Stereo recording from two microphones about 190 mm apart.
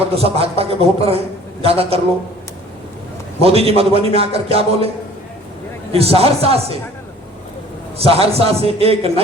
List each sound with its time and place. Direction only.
0.1 s a man's voice: 30° right (ahead or behind)
3.4 s a man's voice: 30° right (ahead or behind)
5.9 s a man's voice: 30° right (ahead or behind)
7.9 s a man's voice: 30° right (ahead or behind)